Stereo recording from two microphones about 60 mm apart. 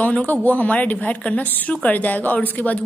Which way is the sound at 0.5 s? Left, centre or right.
Left.